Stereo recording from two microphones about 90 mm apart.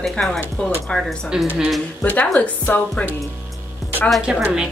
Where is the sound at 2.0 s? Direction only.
15° left (ahead or behind).